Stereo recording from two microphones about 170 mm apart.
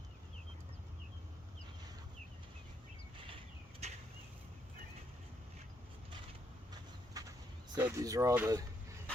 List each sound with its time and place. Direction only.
3.2 s a sound: 35° right (ahead or behind)
7.1 s bird: 20° right (ahead or behind)
7.8 s speech: 15° right (ahead or behind)